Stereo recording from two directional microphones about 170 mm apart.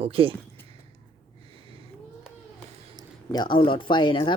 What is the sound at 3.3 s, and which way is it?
Speech, 25° left (ahead or behind).